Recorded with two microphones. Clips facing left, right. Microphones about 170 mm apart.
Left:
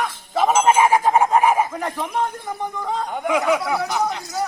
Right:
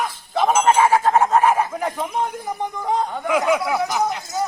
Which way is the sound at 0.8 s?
15° left (ahead or behind).